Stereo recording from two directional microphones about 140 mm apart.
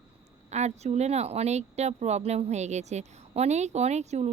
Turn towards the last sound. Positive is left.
turn(degrees=-50)  # may be behind; listen again after turning